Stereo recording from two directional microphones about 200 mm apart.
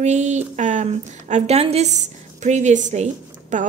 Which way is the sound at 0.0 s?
35° right (ahead or behind).